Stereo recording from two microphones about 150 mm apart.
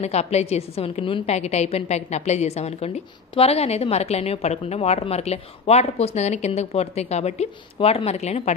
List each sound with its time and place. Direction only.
0.0 s a woman's voice: 45° left (ahead or behind)